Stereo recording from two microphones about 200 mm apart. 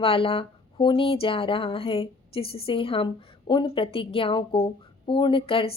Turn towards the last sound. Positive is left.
turn(degrees=25)  # may be behind; listen again after turning